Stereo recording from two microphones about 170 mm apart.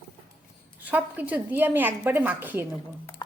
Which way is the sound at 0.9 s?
10° right (ahead or behind).